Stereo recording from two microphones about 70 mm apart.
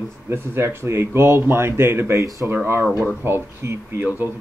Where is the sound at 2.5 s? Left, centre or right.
Right.